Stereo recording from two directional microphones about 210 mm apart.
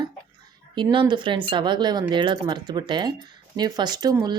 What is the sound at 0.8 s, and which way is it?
Speech, 20° right (ahead or behind).